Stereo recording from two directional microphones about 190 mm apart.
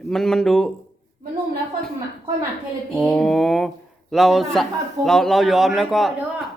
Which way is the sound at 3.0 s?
5° left (ahead or behind).